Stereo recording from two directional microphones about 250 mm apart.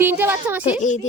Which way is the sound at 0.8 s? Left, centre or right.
Left.